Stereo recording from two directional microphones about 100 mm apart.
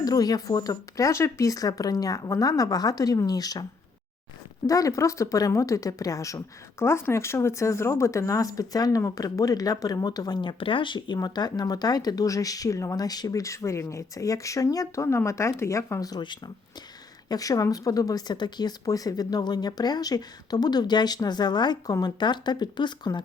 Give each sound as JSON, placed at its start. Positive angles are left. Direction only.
{"t": 0.0, "sound": "speech", "side_deg": 40}